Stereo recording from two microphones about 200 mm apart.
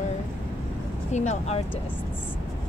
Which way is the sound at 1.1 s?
35° left (ahead or behind).